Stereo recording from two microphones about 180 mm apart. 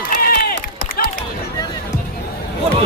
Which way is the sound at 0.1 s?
55° left (ahead or behind).